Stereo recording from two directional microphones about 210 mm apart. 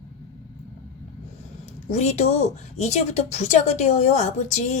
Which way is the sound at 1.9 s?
35° left (ahead or behind).